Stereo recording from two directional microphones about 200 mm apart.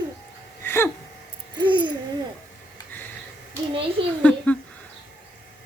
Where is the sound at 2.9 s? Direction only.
10° left (ahead or behind).